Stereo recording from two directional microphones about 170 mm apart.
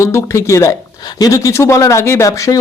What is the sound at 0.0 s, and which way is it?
Speech, 15° left (ahead or behind).